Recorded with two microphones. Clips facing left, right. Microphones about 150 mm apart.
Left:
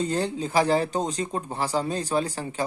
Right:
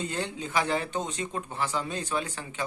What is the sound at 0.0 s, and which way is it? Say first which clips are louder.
Speech: left 7 dB; 35° left (ahead or behind).